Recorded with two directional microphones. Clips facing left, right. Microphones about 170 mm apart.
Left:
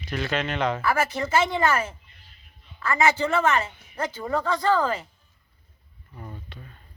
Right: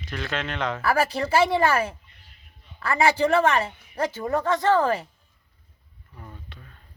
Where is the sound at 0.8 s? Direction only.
35° right (ahead or behind).